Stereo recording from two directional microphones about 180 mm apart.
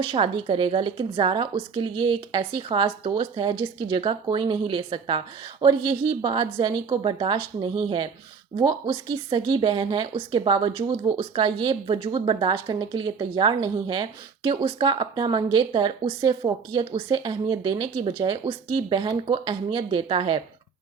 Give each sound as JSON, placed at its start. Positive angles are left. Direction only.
{"t": 0.0, "sound": "speech", "side_deg": -30}